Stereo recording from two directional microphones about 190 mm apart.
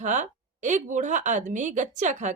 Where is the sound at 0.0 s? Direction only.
40° right (ahead or behind).